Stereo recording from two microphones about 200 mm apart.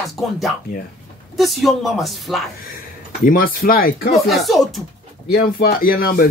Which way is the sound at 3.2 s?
45° left (ahead or behind).